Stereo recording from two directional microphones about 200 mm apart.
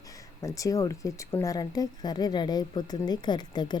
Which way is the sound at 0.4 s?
15° left (ahead or behind).